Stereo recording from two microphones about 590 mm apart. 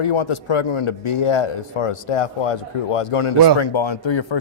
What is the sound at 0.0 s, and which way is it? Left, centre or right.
A man's voice, left.